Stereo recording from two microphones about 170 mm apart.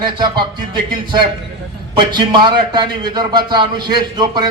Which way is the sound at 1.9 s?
25° right (ahead or behind).